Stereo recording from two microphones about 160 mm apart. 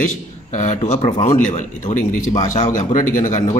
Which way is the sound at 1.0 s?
35° left (ahead or behind).